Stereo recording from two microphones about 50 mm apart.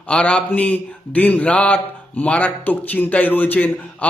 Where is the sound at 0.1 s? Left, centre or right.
Left.